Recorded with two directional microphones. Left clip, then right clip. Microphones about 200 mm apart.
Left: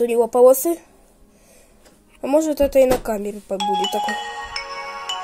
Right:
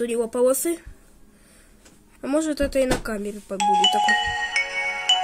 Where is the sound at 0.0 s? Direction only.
Centre (ahead or behind).